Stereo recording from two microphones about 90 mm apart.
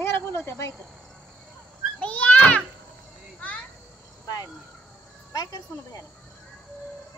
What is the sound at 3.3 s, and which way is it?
Children playing, 15° left (ahead or behind).